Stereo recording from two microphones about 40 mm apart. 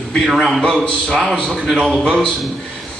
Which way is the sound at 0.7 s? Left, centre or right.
Centre.